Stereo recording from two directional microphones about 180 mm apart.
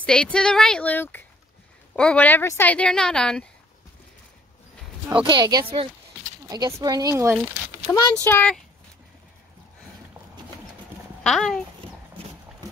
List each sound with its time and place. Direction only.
0.0 s a woman's voice: 5° left (ahead or behind)
5.2 s speech: 25° right (ahead or behind)
7.9 s speech: 15° left (ahead or behind)
11.2 s a woman's voice: 5° left (ahead or behind)